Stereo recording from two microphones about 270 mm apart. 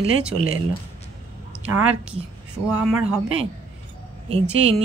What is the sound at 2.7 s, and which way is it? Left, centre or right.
Speech, centre.